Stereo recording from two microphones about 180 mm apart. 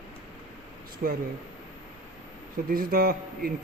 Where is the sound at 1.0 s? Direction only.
60° right (ahead or behind).